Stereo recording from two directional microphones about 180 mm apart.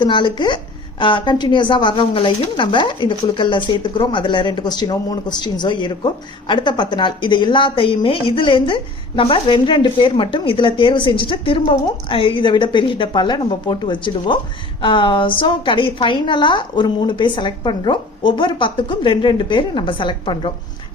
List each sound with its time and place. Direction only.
0.0 s a woman's voice: 25° left (ahead or behind)